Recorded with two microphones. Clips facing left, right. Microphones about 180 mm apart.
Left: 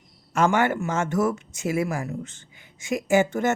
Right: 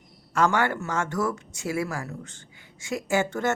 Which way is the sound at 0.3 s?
20° left (ahead or behind).